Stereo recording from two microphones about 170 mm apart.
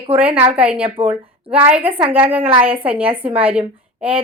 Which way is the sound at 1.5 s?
10° right (ahead or behind).